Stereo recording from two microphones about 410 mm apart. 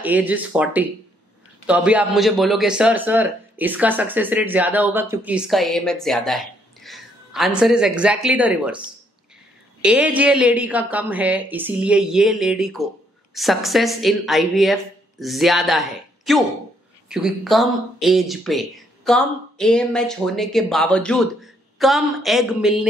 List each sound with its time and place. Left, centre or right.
0.0 s a man's voice: centre
9.8 s a man's voice: centre